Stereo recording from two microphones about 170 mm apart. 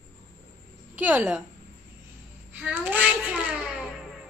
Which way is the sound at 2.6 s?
10° right (ahead or behind).